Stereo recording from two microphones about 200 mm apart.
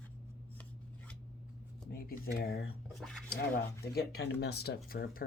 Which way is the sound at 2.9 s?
Centre (ahead or behind).